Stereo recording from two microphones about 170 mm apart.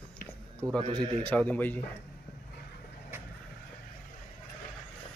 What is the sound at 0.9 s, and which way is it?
Speech, 10° left (ahead or behind).